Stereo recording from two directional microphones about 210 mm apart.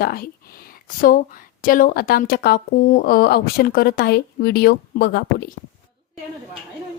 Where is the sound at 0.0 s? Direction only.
45° left (ahead or behind).